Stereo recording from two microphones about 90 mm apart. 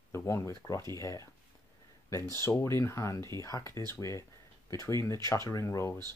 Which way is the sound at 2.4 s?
30° left (ahead or behind).